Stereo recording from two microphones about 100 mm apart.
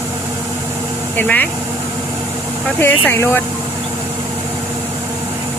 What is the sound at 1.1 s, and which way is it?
Speech, 20° left (ahead or behind).